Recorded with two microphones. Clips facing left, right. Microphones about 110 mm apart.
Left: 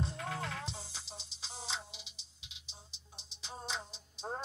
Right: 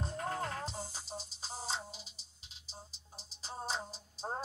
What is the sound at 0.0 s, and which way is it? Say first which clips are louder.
Music: right 2 dB; 40° right (ahead or behind).